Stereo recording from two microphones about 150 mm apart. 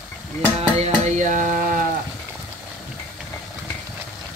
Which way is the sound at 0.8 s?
50° right (ahead or behind).